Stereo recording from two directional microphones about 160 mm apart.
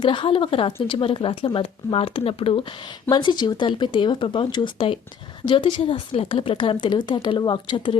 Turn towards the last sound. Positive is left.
turn(degrees=30)  # may be behind; listen again after turning